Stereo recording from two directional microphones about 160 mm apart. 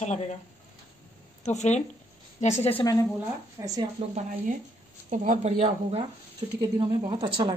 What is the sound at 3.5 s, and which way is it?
Speech, 20° right (ahead or behind).